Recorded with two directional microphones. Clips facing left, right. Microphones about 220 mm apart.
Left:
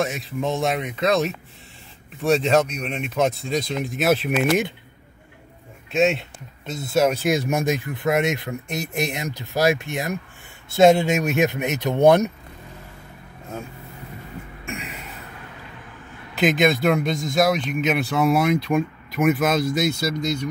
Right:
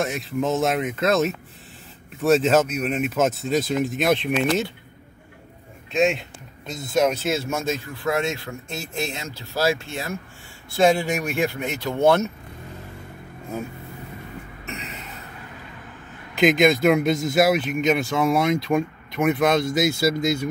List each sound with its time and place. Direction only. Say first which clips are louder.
0.0 s speech: right 1 dB; centre (ahead or behind)
5.9 s speech: left 1 dB; centre (ahead or behind)
14.7 s music: left 2 dB; 10° left (ahead or behind)
16.3 s speech: right 2 dB; centre (ahead or behind)